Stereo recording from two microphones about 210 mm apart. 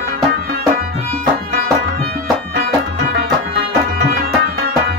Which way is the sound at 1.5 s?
45° right (ahead or behind).